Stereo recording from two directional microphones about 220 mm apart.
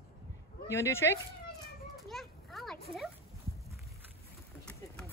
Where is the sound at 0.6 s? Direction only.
10° left (ahead or behind).